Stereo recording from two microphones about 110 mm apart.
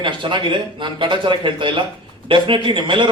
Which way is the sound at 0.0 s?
50° right (ahead or behind).